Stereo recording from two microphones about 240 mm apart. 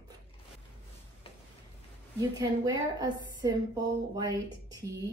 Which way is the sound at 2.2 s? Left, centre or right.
Centre.